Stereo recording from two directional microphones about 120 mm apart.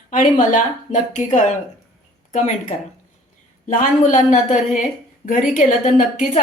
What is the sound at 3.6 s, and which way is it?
Speech, 90° left.